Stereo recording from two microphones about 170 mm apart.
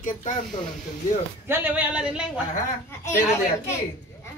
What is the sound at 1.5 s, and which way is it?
Speech, 10° right (ahead or behind).